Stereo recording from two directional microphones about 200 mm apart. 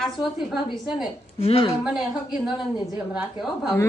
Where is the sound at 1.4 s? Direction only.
30° left (ahead or behind).